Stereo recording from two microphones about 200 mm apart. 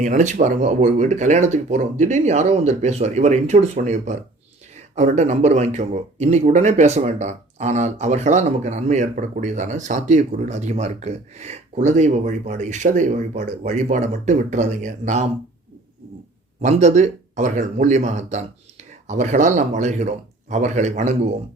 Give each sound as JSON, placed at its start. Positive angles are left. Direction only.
{"t": 0.0, "sound": "speech", "side_deg": -40}
{"t": 16.6, "sound": "speech", "side_deg": -35}